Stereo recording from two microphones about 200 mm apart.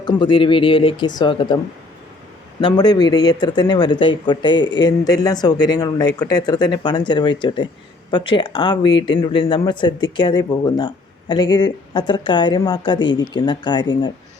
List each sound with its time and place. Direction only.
0.0 s speech: 20° left (ahead or behind)
2.6 s speech: 20° left (ahead or behind)